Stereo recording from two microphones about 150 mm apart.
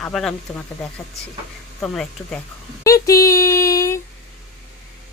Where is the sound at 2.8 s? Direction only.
20° left (ahead or behind).